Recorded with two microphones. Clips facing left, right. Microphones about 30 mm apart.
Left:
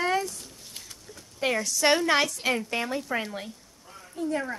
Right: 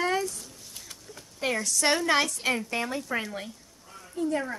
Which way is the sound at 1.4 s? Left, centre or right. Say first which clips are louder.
Left 2 dB; centre.